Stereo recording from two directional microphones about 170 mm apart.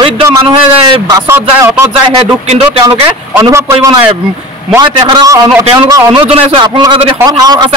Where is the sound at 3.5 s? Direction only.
15° right (ahead or behind).